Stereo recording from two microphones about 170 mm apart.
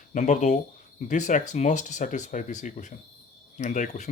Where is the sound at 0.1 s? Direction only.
45° left (ahead or behind).